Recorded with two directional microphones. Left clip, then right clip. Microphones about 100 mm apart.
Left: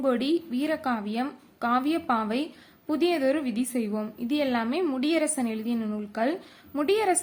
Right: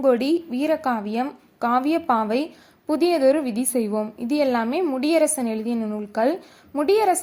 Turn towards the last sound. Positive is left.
turn(degrees=-40)  # may be behind; listen again after turning